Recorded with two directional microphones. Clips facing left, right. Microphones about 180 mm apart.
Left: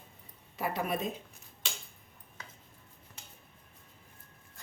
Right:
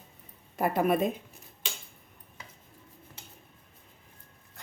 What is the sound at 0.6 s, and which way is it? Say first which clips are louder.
Speech: right 8 dB; 50° right (ahead or behind).